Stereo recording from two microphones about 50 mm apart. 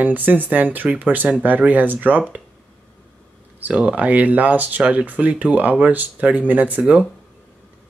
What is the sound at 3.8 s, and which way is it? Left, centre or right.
Speech, right.